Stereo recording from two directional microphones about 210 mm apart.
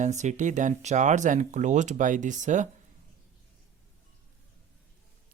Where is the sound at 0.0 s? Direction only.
35° right (ahead or behind).